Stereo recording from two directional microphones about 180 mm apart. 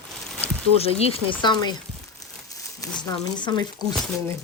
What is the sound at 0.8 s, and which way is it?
Speech, 35° left (ahead or behind).